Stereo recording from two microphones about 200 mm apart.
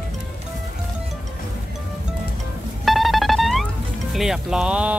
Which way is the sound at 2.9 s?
Centre (ahead or behind).